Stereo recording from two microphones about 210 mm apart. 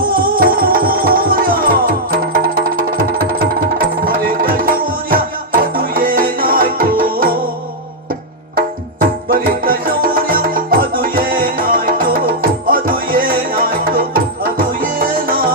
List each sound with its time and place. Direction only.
0.1 s music: 45° right (ahead or behind)
8.5 s music: 40° right (ahead or behind)